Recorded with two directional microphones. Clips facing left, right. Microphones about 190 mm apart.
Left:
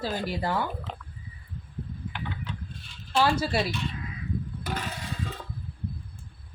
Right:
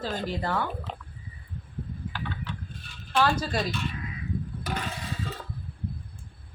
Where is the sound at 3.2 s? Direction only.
10° left (ahead or behind).